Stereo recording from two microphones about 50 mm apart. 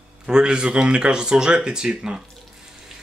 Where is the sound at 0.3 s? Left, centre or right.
Centre.